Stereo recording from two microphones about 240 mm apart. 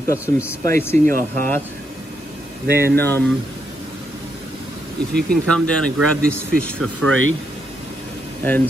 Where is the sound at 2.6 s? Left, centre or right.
Right.